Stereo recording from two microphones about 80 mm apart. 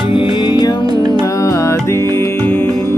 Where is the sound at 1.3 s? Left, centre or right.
Left.